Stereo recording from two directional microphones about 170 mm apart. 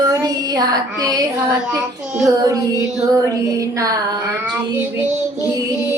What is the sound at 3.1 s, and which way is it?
Child singing, 20° right (ahead or behind).